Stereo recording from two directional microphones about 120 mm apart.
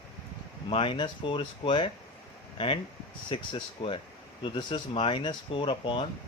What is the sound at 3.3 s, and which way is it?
Speech, 45° left (ahead or behind).